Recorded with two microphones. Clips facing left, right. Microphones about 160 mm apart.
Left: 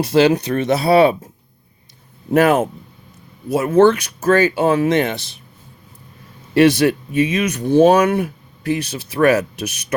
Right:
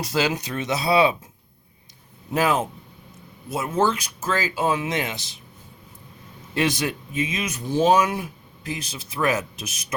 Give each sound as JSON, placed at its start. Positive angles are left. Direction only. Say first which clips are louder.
{"t": 0.0, "sound": "speech", "louder": "left 10 dB", "side_deg": 60}
{"t": 2.3, "sound": "speech", "louder": "left 8 dB", "side_deg": 60}
{"t": 6.5, "sound": "speech", "louder": "left 11 dB", "side_deg": 65}